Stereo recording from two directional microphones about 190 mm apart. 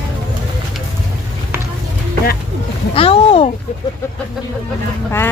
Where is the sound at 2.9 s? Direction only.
30° left (ahead or behind).